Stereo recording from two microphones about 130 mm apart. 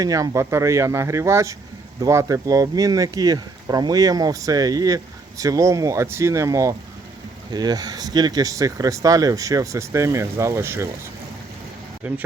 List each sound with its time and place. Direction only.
0.0 s speech: 25° right (ahead or behind)
12.0 s speech: 10° right (ahead or behind)